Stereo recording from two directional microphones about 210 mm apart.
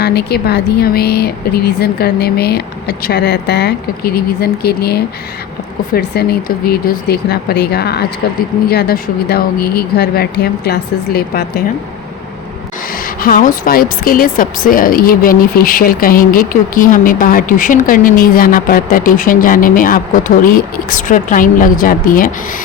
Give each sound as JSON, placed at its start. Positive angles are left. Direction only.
{"t": 0.0, "sound": "speech", "side_deg": 50}
{"t": 13.2, "sound": "speech", "side_deg": 45}